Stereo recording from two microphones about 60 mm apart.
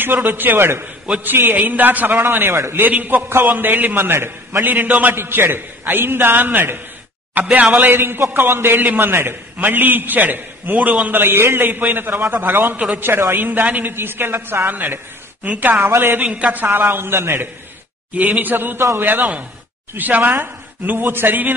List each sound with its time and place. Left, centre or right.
0.0 s a man's voice: right
2.9 s a man's voice: right
5.1 s a man's voice: right
7.9 s a man's voice: right
15.7 s speech: right
16.3 s speech: right
16.6 s a man's voice: right
18.1 s a man's voice: right